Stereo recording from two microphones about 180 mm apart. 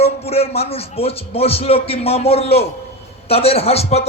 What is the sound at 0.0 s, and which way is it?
A man's voice, 35° left (ahead or behind).